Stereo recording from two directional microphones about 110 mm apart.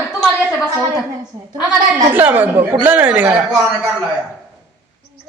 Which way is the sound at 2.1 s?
15° right (ahead or behind).